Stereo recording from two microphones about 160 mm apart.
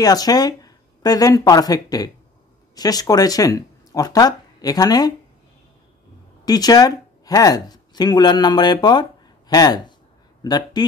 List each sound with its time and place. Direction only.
0.0 s speech: 25° left (ahead or behind)
6.4 s speech: 25° left (ahead or behind)